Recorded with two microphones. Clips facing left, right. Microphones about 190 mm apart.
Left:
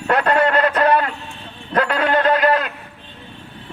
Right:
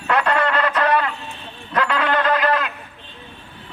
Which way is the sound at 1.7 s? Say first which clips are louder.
Left 3 dB; 50° left (ahead or behind).